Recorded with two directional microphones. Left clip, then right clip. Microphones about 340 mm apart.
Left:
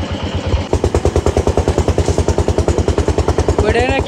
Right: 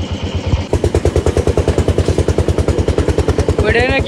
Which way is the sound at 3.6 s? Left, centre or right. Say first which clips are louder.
Right 2 dB; centre.